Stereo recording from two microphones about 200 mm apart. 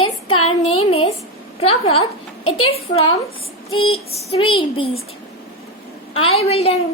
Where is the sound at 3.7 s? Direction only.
30° left (ahead or behind).